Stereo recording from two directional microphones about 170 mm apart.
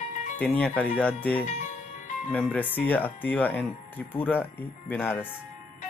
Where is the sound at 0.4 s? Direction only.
5° left (ahead or behind).